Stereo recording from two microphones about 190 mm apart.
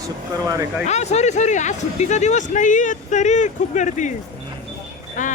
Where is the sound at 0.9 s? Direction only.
35° left (ahead or behind).